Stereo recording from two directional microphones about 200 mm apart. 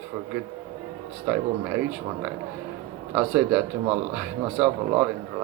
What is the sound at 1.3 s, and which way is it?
Speech, 10° right (ahead or behind).